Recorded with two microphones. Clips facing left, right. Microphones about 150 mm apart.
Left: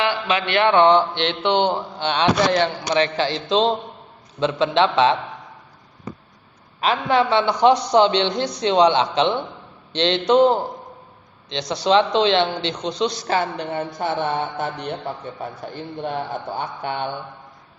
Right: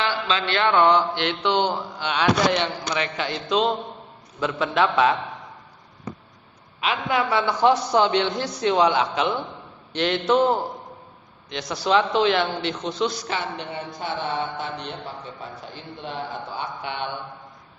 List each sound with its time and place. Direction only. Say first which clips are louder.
0.0 s a man's voice: left 3 dB; 15° left (ahead or behind)
6.7 s a man's voice: left 5 dB; 35° left (ahead or behind); by 13.1 s 20° left (ahead or behind)
13.2 s a woman's voice: left 6 dB; 40° left (ahead or behind)